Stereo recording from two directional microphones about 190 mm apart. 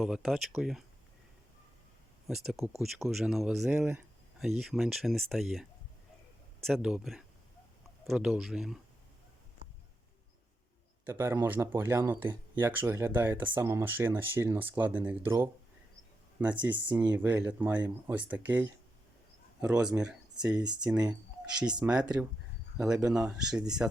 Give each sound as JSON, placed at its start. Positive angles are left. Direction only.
{"t": 0.0, "sound": "speech", "side_deg": 0}
{"t": 2.2, "sound": "speech", "side_deg": 0}
{"t": 6.7, "sound": "speech", "side_deg": 0}
{"t": 11.0, "sound": "speech", "side_deg": -10}